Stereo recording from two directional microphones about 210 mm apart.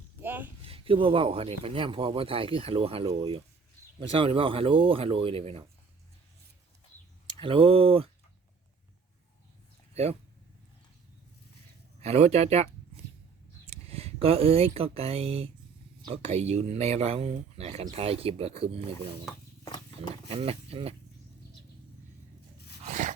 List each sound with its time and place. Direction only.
0.2 s a sound: 10° right (ahead or behind)
0.6 s speech: 25° right (ahead or behind)
7.3 s speech: 25° right (ahead or behind)
9.9 s speech: 30° right (ahead or behind)
11.9 s speech: 30° right (ahead or behind)
13.7 s speech: 30° right (ahead or behind)
20.2 s speech: 30° right (ahead or behind)
22.8 s a sound: 35° right (ahead or behind)